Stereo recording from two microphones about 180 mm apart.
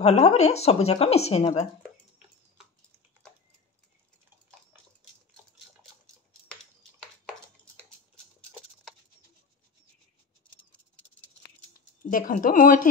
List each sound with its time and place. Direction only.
0.0 s a woman's voice: 35° left (ahead or behind)
12.0 s speech: 50° left (ahead or behind)